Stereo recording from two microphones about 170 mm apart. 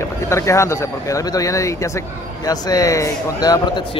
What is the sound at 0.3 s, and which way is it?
Speech, 15° left (ahead or behind).